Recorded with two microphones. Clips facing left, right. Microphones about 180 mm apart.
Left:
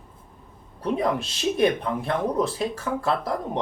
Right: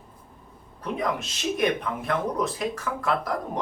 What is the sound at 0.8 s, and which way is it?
Speech, 30° left (ahead or behind).